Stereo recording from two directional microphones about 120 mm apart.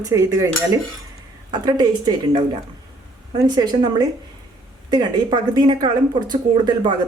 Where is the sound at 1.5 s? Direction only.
35° right (ahead or behind).